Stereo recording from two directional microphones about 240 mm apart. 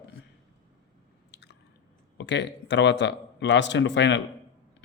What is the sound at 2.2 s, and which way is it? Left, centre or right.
Speech, left.